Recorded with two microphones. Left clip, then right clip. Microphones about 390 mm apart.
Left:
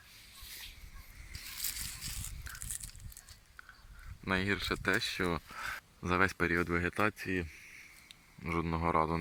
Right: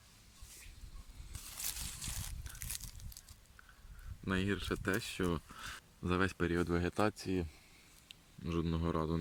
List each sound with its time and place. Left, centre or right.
4.3 s speech: centre
8.4 s speech: centre